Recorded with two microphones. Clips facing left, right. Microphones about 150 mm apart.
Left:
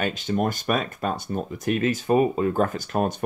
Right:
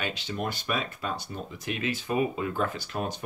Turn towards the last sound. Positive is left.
turn(degrees=50)  # may be behind; listen again after turning